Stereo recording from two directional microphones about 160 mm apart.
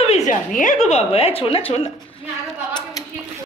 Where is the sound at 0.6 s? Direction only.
50° left (ahead or behind).